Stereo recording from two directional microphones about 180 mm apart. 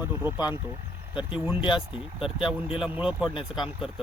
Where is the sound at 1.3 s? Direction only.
5° right (ahead or behind).